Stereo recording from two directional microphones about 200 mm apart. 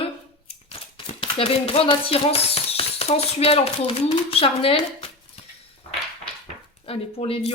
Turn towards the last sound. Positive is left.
turn(degrees=30)  # may be behind; listen again after turning